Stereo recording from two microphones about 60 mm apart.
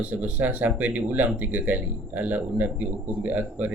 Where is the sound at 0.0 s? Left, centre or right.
Right.